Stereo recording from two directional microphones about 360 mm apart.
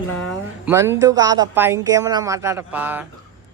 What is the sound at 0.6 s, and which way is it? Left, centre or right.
Speech, centre.